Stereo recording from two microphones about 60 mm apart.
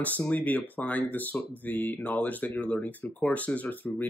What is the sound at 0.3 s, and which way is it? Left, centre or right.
Speech, left.